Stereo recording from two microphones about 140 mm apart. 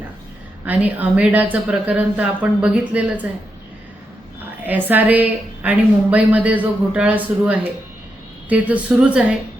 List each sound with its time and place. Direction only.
0.6 s a woman's voice: 10° right (ahead or behind)
4.6 s a woman's voice: 10° right (ahead or behind)